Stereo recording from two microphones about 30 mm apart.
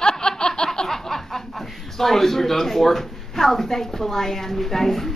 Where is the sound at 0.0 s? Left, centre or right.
Left.